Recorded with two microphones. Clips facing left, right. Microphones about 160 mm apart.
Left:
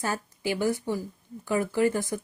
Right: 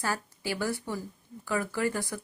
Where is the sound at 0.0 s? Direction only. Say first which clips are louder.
Left 3 dB; 20° left (ahead or behind).